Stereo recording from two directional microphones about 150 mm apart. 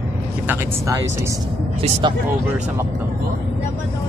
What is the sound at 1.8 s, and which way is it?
Speech, 35° right (ahead or behind).